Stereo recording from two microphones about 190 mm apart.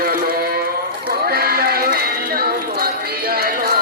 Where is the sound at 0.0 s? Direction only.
50° right (ahead or behind).